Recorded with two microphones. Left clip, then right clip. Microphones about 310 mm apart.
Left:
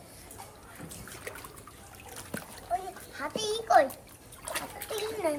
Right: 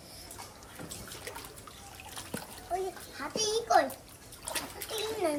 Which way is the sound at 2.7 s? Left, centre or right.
Centre.